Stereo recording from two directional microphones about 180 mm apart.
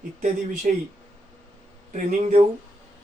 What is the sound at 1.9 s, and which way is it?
Speech, 40° right (ahead or behind).